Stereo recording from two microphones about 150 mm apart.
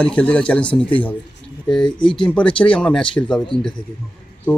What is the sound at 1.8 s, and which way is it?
Speech, 30° left (ahead or behind).